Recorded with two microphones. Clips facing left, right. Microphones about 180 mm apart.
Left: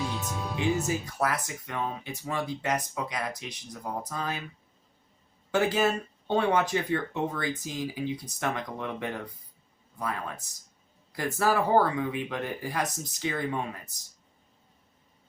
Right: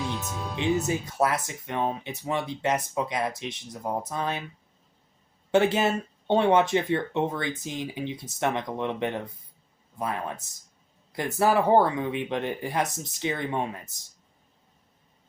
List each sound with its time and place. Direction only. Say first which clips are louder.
0.0 s music: right 1 dB; centre (ahead or behind)
0.5 s speech: right 2 dB; 20° right (ahead or behind)
5.5 s speech: right 3 dB; 25° right (ahead or behind)